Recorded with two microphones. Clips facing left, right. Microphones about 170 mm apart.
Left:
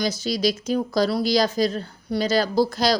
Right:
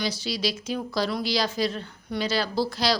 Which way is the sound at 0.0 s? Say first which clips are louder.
Left 5 dB; 45° left (ahead or behind).